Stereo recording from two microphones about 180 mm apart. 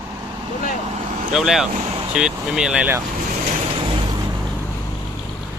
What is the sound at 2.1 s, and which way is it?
Speech, 5° right (ahead or behind).